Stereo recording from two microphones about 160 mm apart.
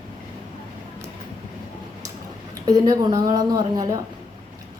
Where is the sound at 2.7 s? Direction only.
20° right (ahead or behind).